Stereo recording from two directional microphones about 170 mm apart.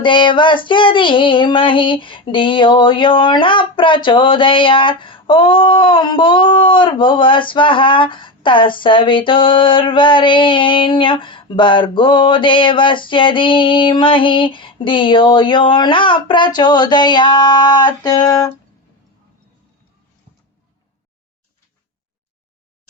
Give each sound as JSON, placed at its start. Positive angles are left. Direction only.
{"t": 0.0, "sound": "child singing", "side_deg": 30}